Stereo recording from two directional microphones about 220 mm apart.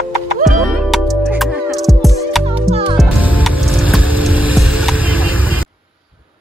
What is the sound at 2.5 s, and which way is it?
Music, 25° right (ahead or behind).